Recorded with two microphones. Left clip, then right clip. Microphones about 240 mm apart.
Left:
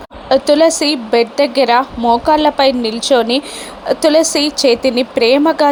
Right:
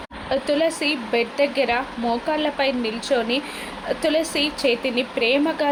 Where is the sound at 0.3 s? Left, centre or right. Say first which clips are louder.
Left 11 dB; left.